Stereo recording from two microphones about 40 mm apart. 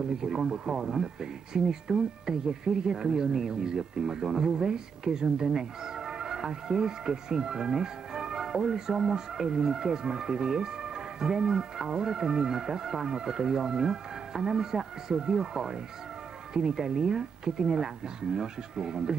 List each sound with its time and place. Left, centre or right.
0.2 s speech: centre